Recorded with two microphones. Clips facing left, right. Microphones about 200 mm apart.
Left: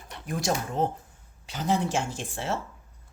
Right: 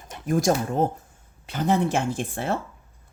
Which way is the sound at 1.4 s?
55° right (ahead or behind).